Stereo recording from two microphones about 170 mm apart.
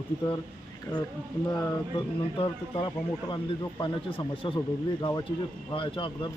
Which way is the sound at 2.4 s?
30° left (ahead or behind).